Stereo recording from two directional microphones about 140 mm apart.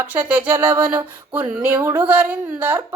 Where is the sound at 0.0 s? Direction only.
15° right (ahead or behind).